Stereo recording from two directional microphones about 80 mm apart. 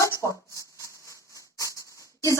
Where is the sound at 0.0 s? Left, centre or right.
Left.